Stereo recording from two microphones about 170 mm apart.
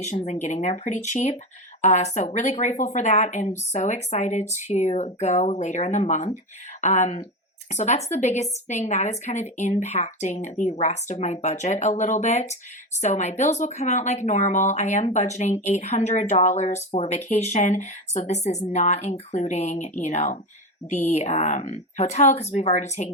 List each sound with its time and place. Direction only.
0.0 s speech: 45° left (ahead or behind)